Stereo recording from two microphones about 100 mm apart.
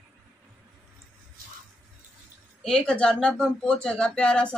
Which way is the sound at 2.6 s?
5° left (ahead or behind).